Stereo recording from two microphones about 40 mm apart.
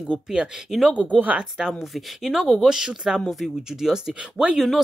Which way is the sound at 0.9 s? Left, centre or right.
Right.